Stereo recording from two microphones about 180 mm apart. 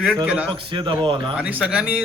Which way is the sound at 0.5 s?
25° right (ahead or behind).